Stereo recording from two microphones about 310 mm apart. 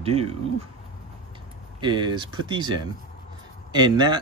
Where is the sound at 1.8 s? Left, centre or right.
Centre.